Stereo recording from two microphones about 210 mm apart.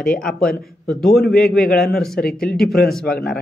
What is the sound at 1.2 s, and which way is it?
Speech, 50° left (ahead or behind).